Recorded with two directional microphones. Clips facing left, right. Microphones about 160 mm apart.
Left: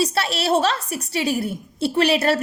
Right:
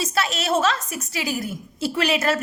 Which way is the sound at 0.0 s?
30° left (ahead or behind).